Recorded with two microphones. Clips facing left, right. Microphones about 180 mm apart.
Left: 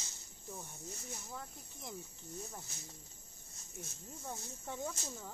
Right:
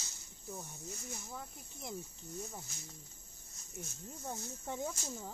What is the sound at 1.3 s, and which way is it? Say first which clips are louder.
Speech: right 1 dB; 15° right (ahead or behind).